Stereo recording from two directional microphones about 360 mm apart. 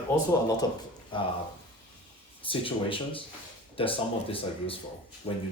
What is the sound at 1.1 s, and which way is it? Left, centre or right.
Speech, centre.